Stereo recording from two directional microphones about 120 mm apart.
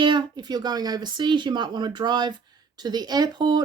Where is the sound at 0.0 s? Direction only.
40° right (ahead or behind).